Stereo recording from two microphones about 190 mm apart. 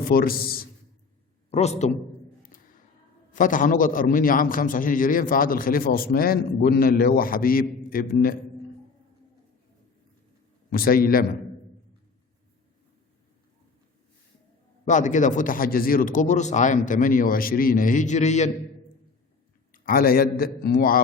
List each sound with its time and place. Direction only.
0.0 s a man's voice: 50° left (ahead or behind)
1.5 s a man's voice: 35° left (ahead or behind)
3.3 s a man's voice: 45° left (ahead or behind)
10.7 s a man's voice: 50° left (ahead or behind)
14.8 s a man's voice: 40° left (ahead or behind)
19.7 s a man's voice: 50° left (ahead or behind)